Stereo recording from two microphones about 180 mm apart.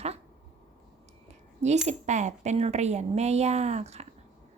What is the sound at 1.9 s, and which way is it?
Speech, 40° right (ahead or behind).